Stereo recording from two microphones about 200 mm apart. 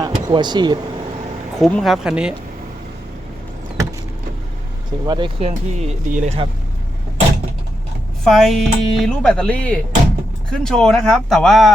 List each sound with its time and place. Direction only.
0.0 s speech: 20° right (ahead or behind)
1.5 s speech: centre (ahead or behind)
5.0 s speech: 25° right (ahead or behind)
8.2 s speech: centre (ahead or behind)